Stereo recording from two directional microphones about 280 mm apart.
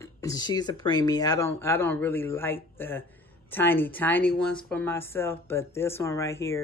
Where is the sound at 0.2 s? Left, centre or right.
Centre.